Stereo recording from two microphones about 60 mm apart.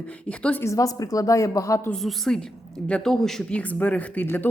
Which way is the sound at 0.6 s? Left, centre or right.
Left.